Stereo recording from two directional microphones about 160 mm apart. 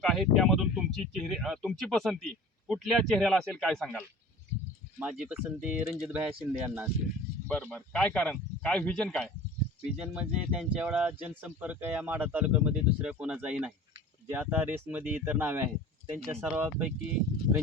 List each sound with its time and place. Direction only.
0.0 s speech: centre (ahead or behind)
7.4 s speech: 5° left (ahead or behind)
10.0 s speech: 5° right (ahead or behind)